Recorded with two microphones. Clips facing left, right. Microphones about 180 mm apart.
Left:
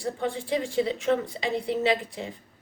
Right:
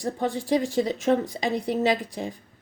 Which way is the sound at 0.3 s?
40° right (ahead or behind).